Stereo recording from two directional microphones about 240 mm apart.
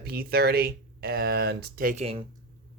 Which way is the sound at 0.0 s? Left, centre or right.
Right.